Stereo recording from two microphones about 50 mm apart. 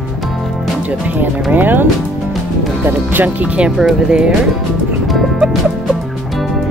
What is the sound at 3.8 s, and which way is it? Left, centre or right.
Speech, centre.